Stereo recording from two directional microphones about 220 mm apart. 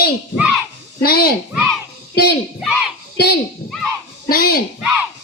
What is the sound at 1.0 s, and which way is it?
Speech, 45° left (ahead or behind).